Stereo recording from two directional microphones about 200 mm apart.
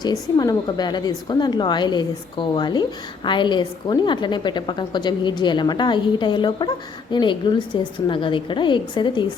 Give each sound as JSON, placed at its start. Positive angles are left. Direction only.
{"t": 0.0, "sound": "a woman's voice", "side_deg": 20}